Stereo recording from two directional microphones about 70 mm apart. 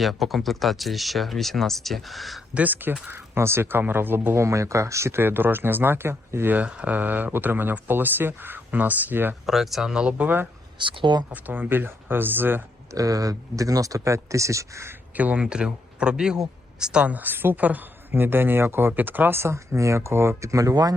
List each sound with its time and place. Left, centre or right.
0.0 s speech: centre
2.6 s speech: right
4.4 s speech: right
6.5 s speech: centre
9.5 s a man's voice: centre; by 12.6 s right
12.9 s speech: right
15.1 s a man's voice: right